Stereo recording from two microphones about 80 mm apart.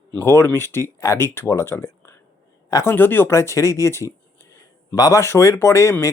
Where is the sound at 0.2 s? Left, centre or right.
Left.